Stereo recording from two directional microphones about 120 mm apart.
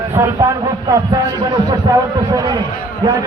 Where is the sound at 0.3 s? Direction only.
30° right (ahead or behind).